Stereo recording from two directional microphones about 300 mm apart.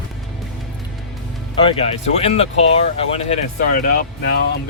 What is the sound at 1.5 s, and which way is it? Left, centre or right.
Speech, centre.